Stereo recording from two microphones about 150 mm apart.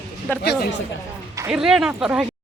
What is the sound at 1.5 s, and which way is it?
Speech, 5° right (ahead or behind).